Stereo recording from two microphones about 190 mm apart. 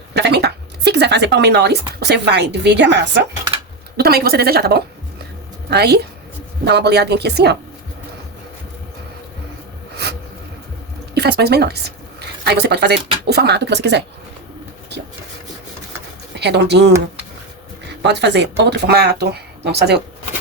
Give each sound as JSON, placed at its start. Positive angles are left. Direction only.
{"t": 0.1, "sound": "a woman's voice", "side_deg": -60}
{"t": 3.9, "sound": "speech", "side_deg": -55}
{"t": 11.1, "sound": "speech", "side_deg": -60}
{"t": 16.4, "sound": "speech", "side_deg": -60}
{"t": 18.0, "sound": "speech", "side_deg": -65}